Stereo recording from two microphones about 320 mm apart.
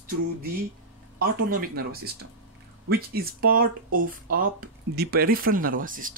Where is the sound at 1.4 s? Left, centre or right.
Right.